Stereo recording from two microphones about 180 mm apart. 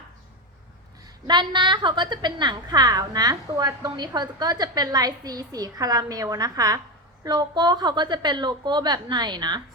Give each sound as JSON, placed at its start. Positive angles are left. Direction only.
{"t": 1.3, "sound": "a woman's voice", "side_deg": -25}